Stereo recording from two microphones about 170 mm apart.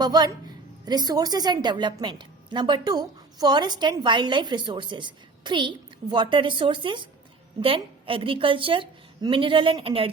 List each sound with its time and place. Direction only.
0.0 s a woman's voice: 25° right (ahead or behind)